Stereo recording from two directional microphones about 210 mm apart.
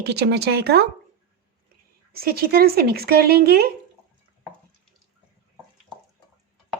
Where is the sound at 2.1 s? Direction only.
45° right (ahead or behind).